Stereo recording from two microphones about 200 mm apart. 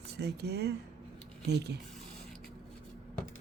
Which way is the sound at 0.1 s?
55° right (ahead or behind).